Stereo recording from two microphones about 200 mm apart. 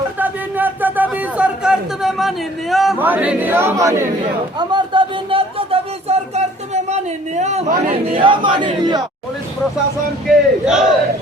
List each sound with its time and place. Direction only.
0.2 s a sound: 10° right (ahead or behind)
4.5 s speech: 25° right (ahead or behind)
8.2 s speech: 25° right (ahead or behind)
10.2 s speech: 5° right (ahead or behind)